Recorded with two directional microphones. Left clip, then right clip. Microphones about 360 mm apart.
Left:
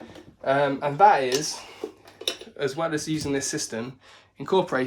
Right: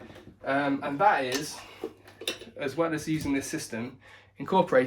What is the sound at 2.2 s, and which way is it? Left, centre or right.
Speech, centre.